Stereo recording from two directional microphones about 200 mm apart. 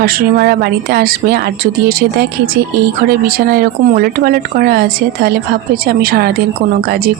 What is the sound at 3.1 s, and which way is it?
A woman's voice, 50° right (ahead or behind).